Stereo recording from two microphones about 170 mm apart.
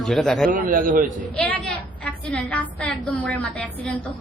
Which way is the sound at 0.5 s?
55° right (ahead or behind).